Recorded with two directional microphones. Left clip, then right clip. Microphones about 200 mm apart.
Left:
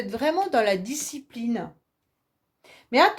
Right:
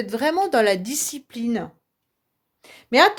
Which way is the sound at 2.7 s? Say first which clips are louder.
Right 3 dB; 45° right (ahead or behind).